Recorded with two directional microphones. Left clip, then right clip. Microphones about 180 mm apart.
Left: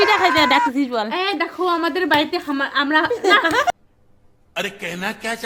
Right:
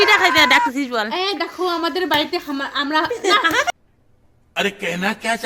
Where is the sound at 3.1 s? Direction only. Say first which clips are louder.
Left 1 dB; 30° left (ahead or behind).